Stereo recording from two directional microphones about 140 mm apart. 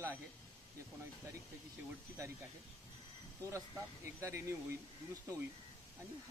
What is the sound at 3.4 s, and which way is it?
Speech, 20° right (ahead or behind).